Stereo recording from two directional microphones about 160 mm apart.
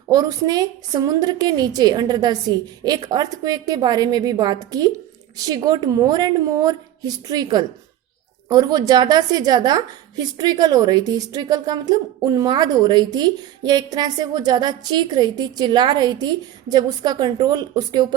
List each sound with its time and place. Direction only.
0.1 s a woman's voice: 20° right (ahead or behind)